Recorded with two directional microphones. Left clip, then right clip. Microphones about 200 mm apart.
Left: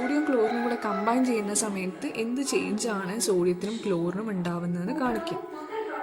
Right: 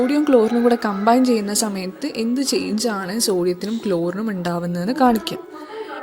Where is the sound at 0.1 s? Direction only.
40° right (ahead or behind).